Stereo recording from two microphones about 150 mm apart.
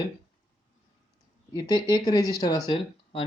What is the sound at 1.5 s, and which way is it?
Speech, 30° left (ahead or behind).